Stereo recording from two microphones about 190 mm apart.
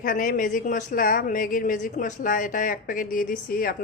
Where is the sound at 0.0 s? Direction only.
45° left (ahead or behind).